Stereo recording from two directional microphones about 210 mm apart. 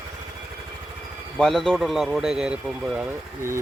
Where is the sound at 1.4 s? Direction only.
Centre (ahead or behind).